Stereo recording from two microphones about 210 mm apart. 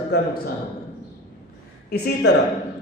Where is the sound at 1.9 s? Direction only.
50° left (ahead or behind).